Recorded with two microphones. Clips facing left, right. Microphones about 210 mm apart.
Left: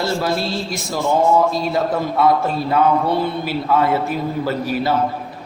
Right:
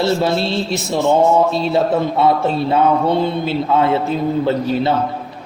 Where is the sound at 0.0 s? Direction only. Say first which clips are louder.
Right 4 dB; 25° right (ahead or behind).